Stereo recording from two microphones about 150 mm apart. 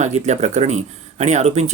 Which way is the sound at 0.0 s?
50° right (ahead or behind).